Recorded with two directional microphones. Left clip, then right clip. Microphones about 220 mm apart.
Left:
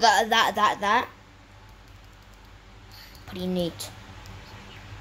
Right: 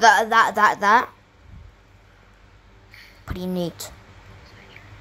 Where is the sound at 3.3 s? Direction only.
20° right (ahead or behind).